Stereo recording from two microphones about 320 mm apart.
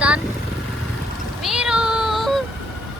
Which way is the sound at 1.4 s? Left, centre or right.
Centre.